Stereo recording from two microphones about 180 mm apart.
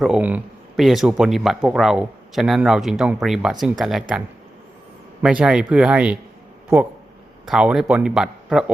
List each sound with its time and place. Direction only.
0.0 s speech: 5° right (ahead or behind)
5.2 s speech: 5° right (ahead or behind)
7.4 s speech: 5° right (ahead or behind)